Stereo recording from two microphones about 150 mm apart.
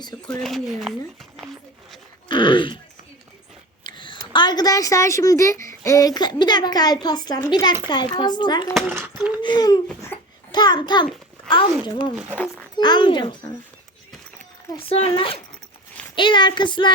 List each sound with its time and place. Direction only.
0.3 s speech: 5° left (ahead or behind)
2.3 s speech: 35° left (ahead or behind)
3.8 s a woman's voice: 30° left (ahead or behind)
11.9 s child singing: 30° left (ahead or behind)
12.1 s speech: 10° right (ahead or behind)
12.7 s child singing: 30° left (ahead or behind)
14.8 s child singing: 40° left (ahead or behind)